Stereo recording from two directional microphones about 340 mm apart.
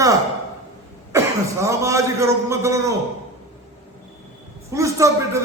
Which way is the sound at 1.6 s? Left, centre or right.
Centre.